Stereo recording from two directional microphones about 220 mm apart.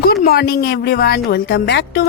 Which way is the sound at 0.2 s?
45° left (ahead or behind).